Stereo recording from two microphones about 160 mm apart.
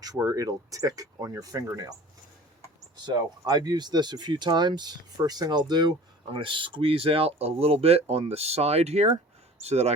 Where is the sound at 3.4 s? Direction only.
25° right (ahead or behind).